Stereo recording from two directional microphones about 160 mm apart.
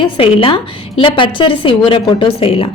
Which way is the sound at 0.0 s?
35° left (ahead or behind).